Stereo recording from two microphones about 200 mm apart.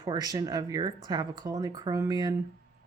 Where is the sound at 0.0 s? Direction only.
20° right (ahead or behind).